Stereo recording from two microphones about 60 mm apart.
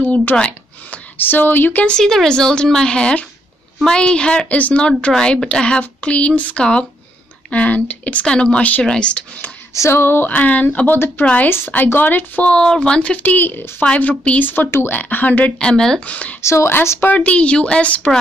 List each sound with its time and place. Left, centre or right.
0.0 s speech: left
1.9 s speech: centre
4.6 s speech: left
5.1 s speech: centre
9.8 s speech: left
10.3 s speech: left
11.4 s speech: left
12.4 s speech: centre
13.1 s speech: left
13.8 s speech: left
15.6 s speech: centre
16.1 s speech: left
16.4 s speech: left
17.0 s speech: left